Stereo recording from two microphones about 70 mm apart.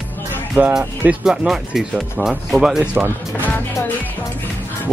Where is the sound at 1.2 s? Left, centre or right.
Centre.